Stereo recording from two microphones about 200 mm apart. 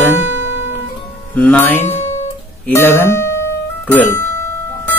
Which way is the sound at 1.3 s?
5° left (ahead or behind).